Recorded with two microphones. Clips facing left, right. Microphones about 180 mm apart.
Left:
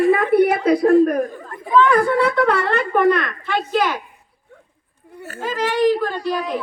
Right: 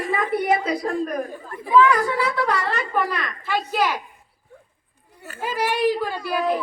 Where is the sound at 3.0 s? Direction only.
5° right (ahead or behind).